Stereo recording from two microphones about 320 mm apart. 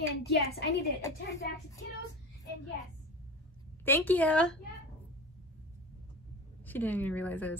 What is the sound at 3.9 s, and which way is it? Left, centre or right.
Speech, centre.